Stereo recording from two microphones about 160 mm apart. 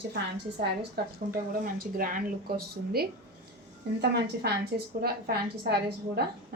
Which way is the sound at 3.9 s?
90° right.